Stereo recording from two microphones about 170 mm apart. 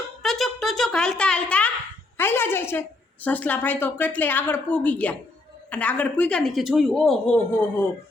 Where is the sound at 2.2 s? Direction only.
15° left (ahead or behind).